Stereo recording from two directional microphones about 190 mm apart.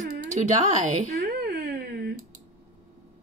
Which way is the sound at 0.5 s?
35° right (ahead or behind).